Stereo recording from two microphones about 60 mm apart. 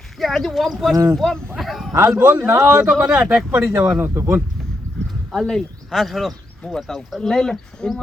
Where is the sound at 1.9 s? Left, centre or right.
Right.